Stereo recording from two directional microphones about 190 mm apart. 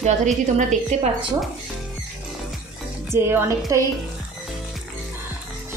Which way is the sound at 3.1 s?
15° right (ahead or behind).